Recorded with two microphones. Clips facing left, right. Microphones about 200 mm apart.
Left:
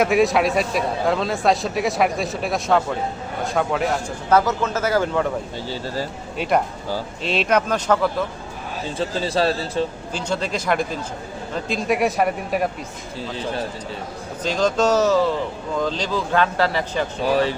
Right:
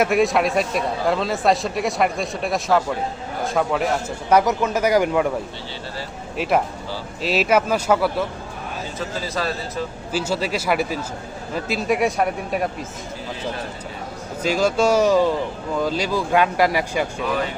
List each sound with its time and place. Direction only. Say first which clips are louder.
0.0 s a man's voice: left 1 dB; centre (ahead or behind)
4.3 s speech: right 1 dB; 15° right (ahead or behind)
6.3 s speech: even; centre (ahead or behind)
9.0 s a man's voice: left 6 dB; 30° left (ahead or behind)
10.1 s a man's voice: right 2 dB; 5° right (ahead or behind)
14.4 s speech: right 1 dB; 10° right (ahead or behind)
17.2 s speech: left 9 dB; 30° left (ahead or behind)